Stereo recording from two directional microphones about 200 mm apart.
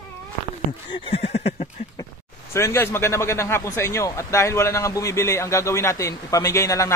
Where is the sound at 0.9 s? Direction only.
25° left (ahead or behind).